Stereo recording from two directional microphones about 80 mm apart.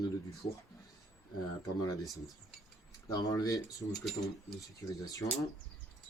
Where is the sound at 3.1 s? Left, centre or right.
Left.